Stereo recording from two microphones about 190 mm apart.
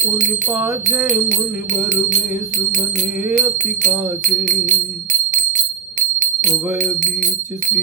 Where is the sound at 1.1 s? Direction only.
40° right (ahead or behind).